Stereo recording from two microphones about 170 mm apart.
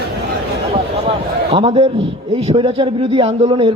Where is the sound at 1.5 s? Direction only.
30° right (ahead or behind).